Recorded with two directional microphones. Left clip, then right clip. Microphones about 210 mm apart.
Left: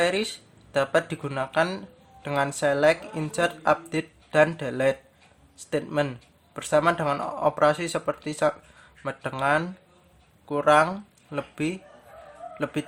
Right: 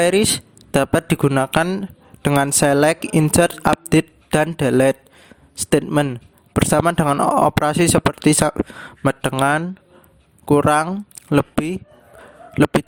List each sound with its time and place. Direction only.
0.0 s speech: 50° right (ahead or behind)